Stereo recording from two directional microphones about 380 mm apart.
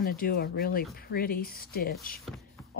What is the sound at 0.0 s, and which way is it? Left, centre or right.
A woman's voice, left.